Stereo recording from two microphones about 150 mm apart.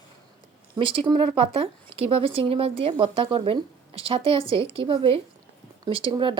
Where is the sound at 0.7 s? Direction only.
35° right (ahead or behind).